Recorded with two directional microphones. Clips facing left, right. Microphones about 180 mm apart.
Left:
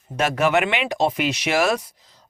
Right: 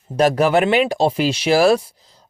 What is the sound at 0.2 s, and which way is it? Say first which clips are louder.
Speech: right 5 dB; 35° right (ahead or behind).